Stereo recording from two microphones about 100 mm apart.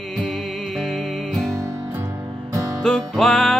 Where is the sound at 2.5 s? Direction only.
35° right (ahead or behind).